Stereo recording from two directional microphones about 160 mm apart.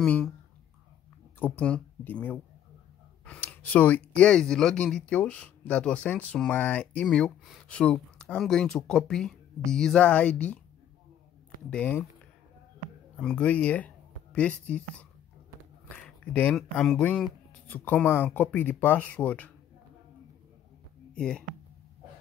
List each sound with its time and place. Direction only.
0.0 s speech: 5° left (ahead or behind)
1.4 s speech: 10° left (ahead or behind)
11.7 s speech: 10° left (ahead or behind)
13.1 s speech: 5° left (ahead or behind)
16.3 s speech: 10° left (ahead or behind)
21.1 s speech: 5° left (ahead or behind)